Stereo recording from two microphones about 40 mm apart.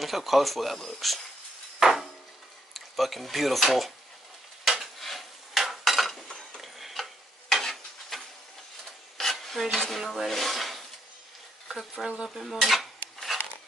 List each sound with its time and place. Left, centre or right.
0.0 s dishes: centre
1.8 s a sound: centre
2.7 s speech: centre
4.6 s dishes: centre
6.2 s stir: centre
6.6 s stir: centre
8.8 s filing: centre
9.8 s dishes: centre
11.7 s speech: centre
12.3 s cutlery: centre